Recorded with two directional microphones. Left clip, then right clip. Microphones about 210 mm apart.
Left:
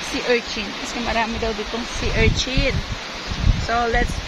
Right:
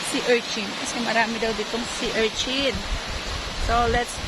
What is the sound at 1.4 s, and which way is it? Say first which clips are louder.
Speech: left 1 dB; 55° right (ahead or behind).